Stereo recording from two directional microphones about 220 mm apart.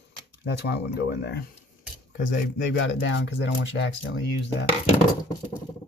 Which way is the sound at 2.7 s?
55° left (ahead or behind).